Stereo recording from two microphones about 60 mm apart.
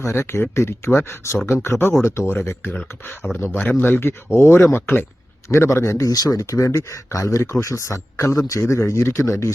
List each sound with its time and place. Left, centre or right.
0.0 s speech: left
1.5 s speech: left
5.5 s speech: left
6.0 s speech: left
8.3 s a man's voice: left
8.6 s speech: left